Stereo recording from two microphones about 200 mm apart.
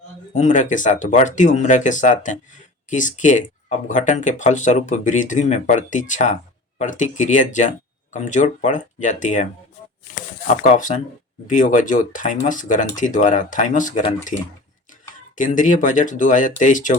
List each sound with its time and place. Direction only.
0.3 s speech: 40° left (ahead or behind)
15.4 s speech: 40° left (ahead or behind)